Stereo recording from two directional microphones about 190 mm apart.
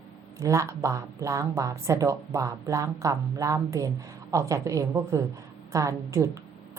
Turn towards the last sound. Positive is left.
turn(degrees=-15)  # may be behind; listen again after turning